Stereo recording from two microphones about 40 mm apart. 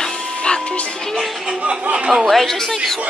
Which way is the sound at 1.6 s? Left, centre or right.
Right.